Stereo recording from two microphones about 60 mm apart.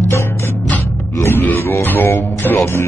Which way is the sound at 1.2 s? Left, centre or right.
Left.